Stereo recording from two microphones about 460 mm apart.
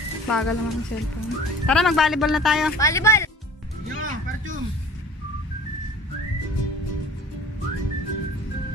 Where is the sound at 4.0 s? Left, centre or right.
Centre.